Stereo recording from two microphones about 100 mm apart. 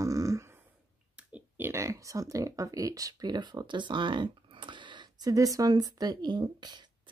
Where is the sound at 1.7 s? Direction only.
30° right (ahead or behind).